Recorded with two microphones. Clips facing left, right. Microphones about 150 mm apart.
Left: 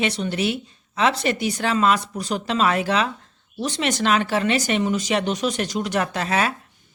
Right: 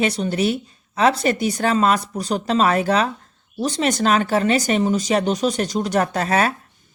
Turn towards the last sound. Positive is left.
turn(degrees=-40)  # may be behind; listen again after turning